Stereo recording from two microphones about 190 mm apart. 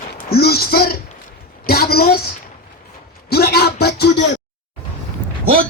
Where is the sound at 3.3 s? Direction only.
55° left (ahead or behind).